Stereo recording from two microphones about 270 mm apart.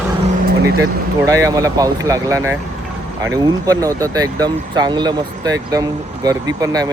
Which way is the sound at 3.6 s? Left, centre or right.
Centre.